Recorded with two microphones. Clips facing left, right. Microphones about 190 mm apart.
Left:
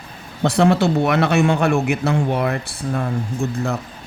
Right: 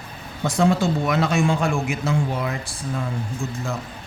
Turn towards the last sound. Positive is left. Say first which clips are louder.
# left 6 dB
turn(degrees=65)  # may be behind; listen again after turning